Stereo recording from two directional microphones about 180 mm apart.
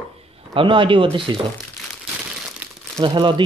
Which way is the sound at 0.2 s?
35° right (ahead or behind).